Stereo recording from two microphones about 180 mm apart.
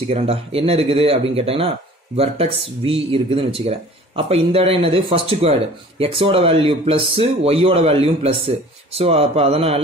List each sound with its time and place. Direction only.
0.1 s speech: 35° right (ahead or behind)